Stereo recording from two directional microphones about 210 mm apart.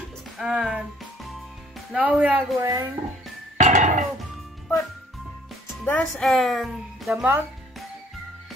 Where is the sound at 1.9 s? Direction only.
5° right (ahead or behind).